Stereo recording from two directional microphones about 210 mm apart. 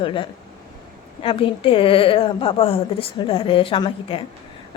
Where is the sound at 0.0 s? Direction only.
25° left (ahead or behind).